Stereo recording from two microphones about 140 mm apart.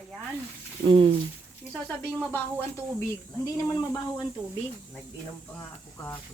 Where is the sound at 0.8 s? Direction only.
40° right (ahead or behind).